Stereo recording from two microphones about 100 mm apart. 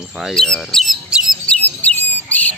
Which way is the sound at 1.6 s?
15° left (ahead or behind).